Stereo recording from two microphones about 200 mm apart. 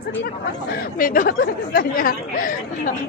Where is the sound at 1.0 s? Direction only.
45° left (ahead or behind).